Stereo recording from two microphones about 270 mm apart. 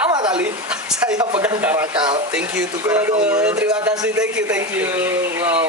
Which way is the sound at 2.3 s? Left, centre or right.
Centre.